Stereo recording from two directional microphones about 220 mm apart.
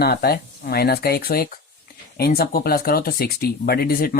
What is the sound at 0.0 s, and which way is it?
Speech, 45° left (ahead or behind).